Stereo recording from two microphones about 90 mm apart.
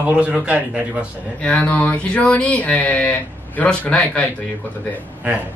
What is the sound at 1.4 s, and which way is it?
Speech, 15° left (ahead or behind).